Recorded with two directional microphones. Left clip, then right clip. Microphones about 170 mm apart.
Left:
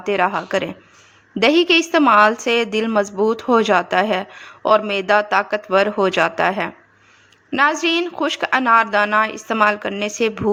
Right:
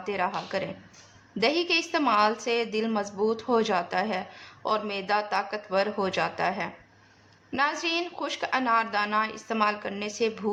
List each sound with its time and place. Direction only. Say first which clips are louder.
0.0 s a woman's voice: left 11 dB; 40° left (ahead or behind)